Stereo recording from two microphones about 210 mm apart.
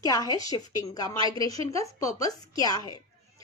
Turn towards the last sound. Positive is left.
turn(degrees=20)  # may be behind; listen again after turning